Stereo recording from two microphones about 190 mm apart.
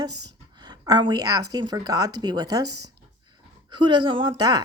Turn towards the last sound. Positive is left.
turn(degrees=-20)  # may be behind; listen again after turning